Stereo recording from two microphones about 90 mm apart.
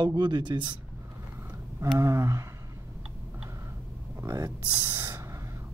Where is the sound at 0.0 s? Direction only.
55° right (ahead or behind).